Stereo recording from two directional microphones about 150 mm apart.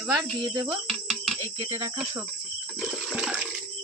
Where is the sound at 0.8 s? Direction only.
Centre (ahead or behind).